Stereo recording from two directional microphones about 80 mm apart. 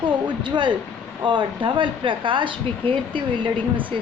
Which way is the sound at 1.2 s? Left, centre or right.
Right.